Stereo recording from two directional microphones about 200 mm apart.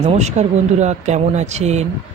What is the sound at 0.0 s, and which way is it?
Speech, 35° right (ahead or behind).